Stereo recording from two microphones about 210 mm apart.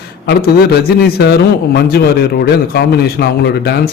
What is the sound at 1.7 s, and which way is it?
A man's voice, 50° left (ahead or behind).